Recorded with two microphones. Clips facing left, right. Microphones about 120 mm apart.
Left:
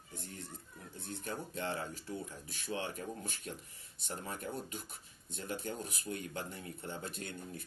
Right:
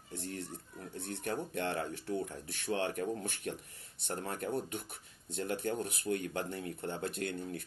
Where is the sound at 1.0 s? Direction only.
65° right (ahead or behind).